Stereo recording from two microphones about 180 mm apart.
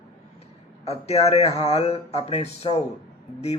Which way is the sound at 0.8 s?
35° left (ahead or behind).